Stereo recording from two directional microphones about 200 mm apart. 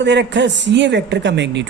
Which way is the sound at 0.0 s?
60° right (ahead or behind).